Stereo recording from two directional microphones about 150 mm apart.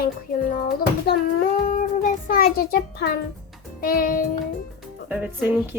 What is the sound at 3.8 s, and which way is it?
Music, 75° left (ahead or behind).